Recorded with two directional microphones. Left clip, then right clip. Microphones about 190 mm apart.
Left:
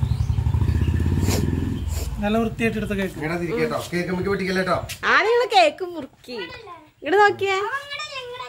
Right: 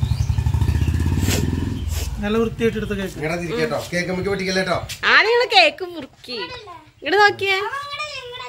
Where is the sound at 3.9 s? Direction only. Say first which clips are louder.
Right 2 dB; 35° right (ahead or behind).